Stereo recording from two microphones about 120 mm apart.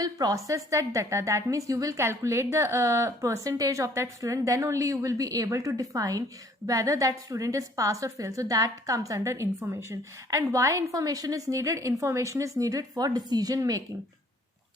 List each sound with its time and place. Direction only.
0.0 s a woman's voice: 30° right (ahead or behind)